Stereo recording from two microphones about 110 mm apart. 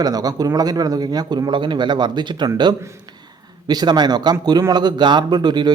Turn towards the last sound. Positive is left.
turn(degrees=-40)  # may be behind; listen again after turning